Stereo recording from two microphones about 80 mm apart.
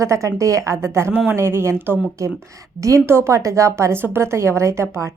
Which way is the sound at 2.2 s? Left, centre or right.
Right.